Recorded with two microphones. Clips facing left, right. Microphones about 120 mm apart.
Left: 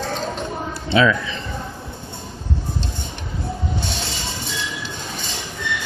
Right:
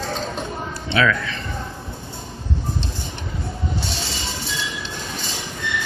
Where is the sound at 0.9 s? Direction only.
20° left (ahead or behind).